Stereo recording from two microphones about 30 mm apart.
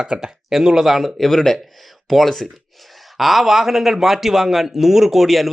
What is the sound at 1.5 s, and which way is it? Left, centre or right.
Speech, centre.